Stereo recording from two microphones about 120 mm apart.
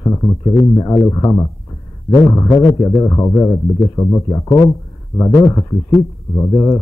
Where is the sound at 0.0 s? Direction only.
25° left (ahead or behind).